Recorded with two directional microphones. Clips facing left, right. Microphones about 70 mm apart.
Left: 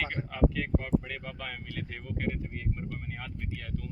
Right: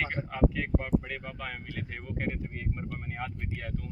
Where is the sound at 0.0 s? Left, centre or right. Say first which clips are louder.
Right 1 dB; centre.